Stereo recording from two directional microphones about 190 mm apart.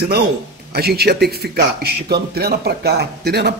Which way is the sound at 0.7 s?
55° right (ahead or behind).